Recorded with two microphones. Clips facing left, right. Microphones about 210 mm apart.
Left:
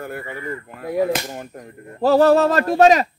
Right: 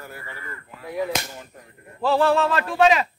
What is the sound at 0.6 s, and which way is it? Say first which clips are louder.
Speech: left 6 dB; 55° left (ahead or behind).